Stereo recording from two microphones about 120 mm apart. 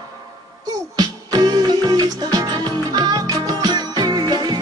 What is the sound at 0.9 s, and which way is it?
Music, 35° right (ahead or behind).